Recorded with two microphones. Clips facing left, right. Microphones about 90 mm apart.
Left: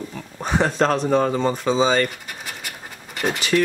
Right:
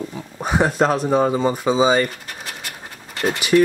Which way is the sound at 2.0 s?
5° left (ahead or behind).